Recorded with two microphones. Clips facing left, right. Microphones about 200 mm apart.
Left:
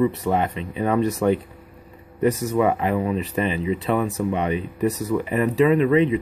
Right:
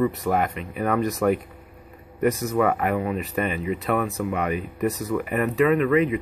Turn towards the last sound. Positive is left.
turn(degrees=25)  # may be behind; listen again after turning